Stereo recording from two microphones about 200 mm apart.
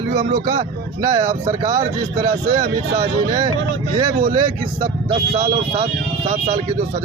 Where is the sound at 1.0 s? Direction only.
20° right (ahead or behind).